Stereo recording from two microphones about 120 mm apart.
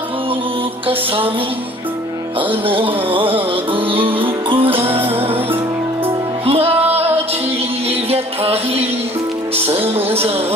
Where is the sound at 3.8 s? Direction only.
50° right (ahead or behind).